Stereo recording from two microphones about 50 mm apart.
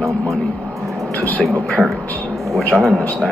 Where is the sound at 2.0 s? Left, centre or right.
Left.